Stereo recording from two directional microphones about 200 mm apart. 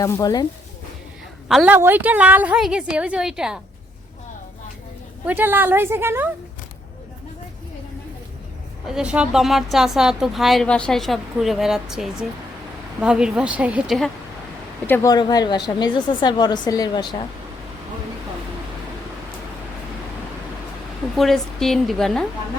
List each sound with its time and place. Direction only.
0.0 s a woman's voice: 15° left (ahead or behind)
1.5 s a woman's voice: 5° right (ahead or behind)
5.2 s a woman's voice: 10° right (ahead or behind)
8.9 s a woman's voice: 5° right (ahead or behind)
14.8 s a woman's voice: 15° left (ahead or behind)
21.2 s a woman's voice: centre (ahead or behind)